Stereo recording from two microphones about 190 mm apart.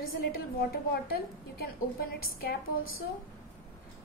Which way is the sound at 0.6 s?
55° left (ahead or behind).